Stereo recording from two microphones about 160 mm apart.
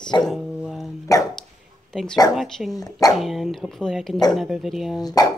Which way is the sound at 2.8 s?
20° left (ahead or behind).